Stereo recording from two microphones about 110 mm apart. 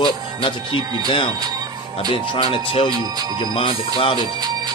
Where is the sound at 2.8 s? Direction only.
40° right (ahead or behind).